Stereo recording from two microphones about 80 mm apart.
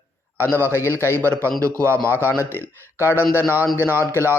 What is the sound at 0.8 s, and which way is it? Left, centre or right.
Speech, right.